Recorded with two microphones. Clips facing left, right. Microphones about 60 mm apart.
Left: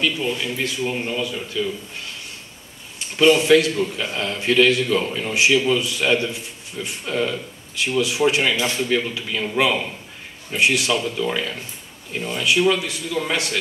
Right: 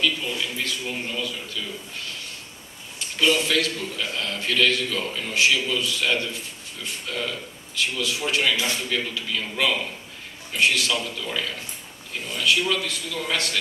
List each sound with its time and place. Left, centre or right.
0.0 s a man's voice: centre
3.4 s a man's voice: left